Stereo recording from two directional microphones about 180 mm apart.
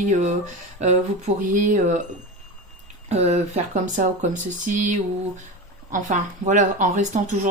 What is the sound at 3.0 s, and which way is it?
A woman's voice, 35° right (ahead or behind).